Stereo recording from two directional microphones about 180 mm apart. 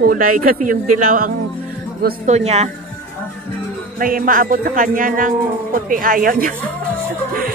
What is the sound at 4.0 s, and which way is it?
Speech, 50° right (ahead or behind).